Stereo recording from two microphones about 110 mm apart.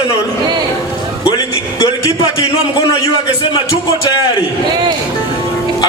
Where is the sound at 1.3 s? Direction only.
35° left (ahead or behind).